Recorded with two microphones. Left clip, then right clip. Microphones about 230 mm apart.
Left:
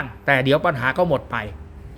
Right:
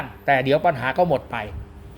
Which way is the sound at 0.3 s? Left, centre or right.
Centre.